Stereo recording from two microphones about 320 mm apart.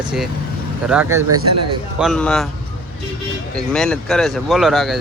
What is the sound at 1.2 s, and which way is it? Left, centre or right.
Speech, right.